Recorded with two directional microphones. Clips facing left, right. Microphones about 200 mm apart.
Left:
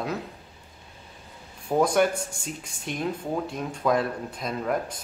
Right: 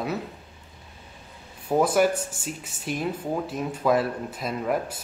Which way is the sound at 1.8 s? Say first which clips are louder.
Even; 5° right (ahead or behind).